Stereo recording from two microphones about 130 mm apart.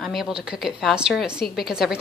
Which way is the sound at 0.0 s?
Centre (ahead or behind).